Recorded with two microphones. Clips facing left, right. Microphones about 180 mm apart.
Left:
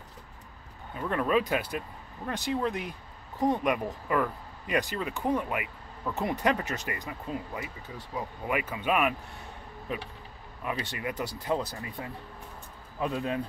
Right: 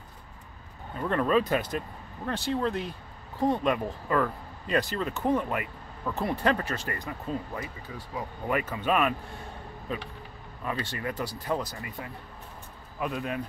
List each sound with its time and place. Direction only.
0.9 s speech: 5° left (ahead or behind)
10.6 s speech: 15° left (ahead or behind)
13.0 s speech: 30° left (ahead or behind)